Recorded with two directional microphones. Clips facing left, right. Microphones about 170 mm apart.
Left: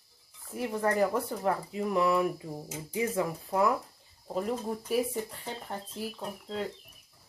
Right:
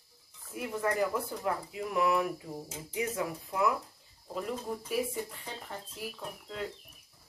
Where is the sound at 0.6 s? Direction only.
35° left (ahead or behind).